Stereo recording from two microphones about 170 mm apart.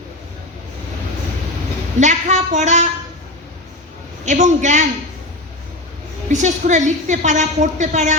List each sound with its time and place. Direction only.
2.0 s a woman's voice: 45° right (ahead or behind)
4.3 s a woman's voice: 45° right (ahead or behind)
6.3 s a woman's voice: 45° right (ahead or behind)